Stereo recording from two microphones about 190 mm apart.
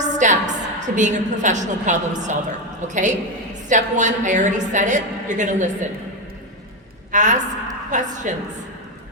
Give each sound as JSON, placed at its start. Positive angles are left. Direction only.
{"t": 0.0, "sound": "a woman's voice", "side_deg": -40}
{"t": 7.1, "sound": "a woman's voice", "side_deg": -40}